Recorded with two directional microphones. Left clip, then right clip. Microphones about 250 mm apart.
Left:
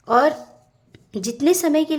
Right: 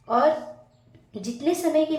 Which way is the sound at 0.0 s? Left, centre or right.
Left.